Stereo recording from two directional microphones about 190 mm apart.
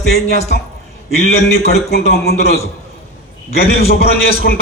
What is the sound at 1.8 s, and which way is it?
Speech, 55° left (ahead or behind).